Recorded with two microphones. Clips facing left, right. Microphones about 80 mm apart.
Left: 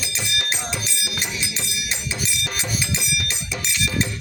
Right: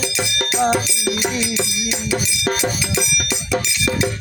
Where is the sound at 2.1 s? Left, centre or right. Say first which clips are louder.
Right 10 dB; right.